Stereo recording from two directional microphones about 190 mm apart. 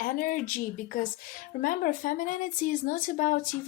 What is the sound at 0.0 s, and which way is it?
Speech, 45° left (ahead or behind).